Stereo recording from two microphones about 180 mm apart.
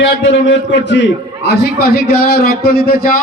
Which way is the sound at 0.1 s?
75° left (ahead or behind).